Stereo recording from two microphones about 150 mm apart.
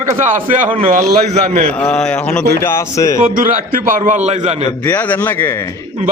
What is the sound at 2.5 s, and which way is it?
Speech, 20° left (ahead or behind).